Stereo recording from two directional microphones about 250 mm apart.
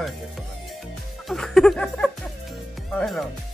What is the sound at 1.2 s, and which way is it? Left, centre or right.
Music, centre.